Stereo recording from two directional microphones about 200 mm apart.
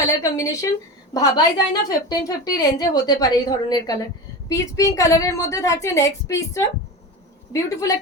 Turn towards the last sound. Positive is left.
turn(degrees=15)  # may be behind; listen again after turning